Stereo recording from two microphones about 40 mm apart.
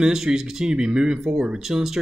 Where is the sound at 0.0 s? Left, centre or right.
Centre.